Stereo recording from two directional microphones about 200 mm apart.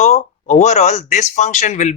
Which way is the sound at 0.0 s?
35° left (ahead or behind).